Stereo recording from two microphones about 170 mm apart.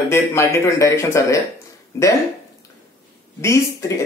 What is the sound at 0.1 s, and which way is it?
A man's voice, 15° left (ahead or behind).